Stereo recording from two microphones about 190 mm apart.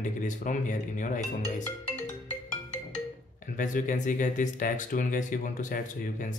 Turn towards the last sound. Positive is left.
turn(degrees=45)  # may be behind; listen again after turning